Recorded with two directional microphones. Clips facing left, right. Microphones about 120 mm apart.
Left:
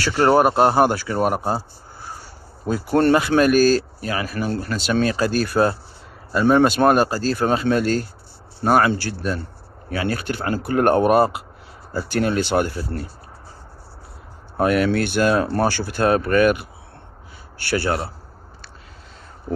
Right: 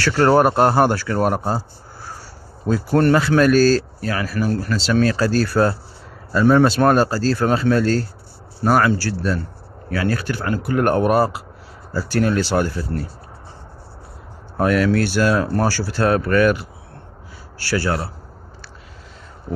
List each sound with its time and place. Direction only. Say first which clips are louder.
0.0 s a man's voice: right 1 dB; 15° left (ahead or behind)
2.7 s a man's voice: right 1 dB; 20° left (ahead or behind)
14.6 s speech: right 1 dB; 25° left (ahead or behind)